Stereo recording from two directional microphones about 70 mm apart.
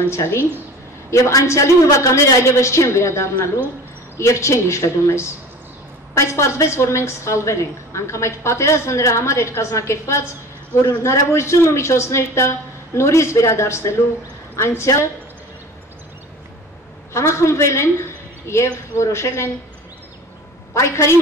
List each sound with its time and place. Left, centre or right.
0.1 s a woman's voice: left
17.1 s a woman's voice: left
20.7 s a woman's voice: left